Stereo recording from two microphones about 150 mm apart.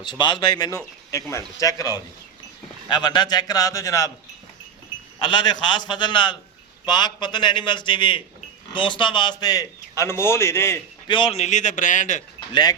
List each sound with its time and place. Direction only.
0.0 s a man's voice: 30° left (ahead or behind)
5.2 s a man's voice: 30° left (ahead or behind); by 10.8 s 15° left (ahead or behind)
11.1 s a man's voice: 40° left (ahead or behind); by 12.2 s 55° left (ahead or behind)